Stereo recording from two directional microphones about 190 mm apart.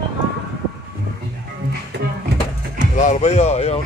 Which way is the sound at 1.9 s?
60° right (ahead or behind).